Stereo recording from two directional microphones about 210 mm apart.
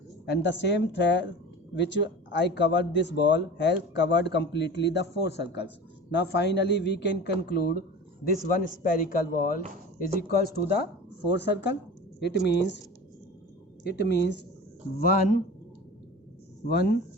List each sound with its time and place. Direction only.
0.3 s a man's voice: 55° left (ahead or behind)
13.8 s speech: 50° left (ahead or behind)
14.9 s speech: 40° left (ahead or behind)
16.6 s speech: 50° left (ahead or behind)